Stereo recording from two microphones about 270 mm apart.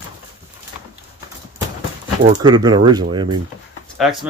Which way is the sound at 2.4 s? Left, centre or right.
Centre.